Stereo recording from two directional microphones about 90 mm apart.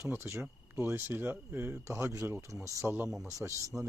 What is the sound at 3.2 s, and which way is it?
Speech, 35° right (ahead or behind).